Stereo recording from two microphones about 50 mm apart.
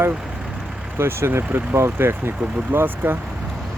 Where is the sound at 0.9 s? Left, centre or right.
Right.